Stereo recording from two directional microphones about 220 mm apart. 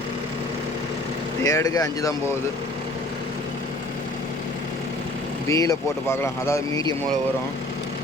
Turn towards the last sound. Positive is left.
turn(degrees=15)  # may be behind; listen again after turning